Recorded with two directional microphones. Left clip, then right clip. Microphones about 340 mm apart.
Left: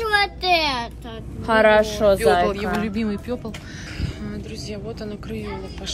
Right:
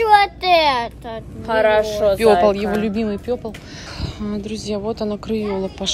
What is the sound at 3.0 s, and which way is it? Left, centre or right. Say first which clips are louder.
Speech: right 5 dB; centre.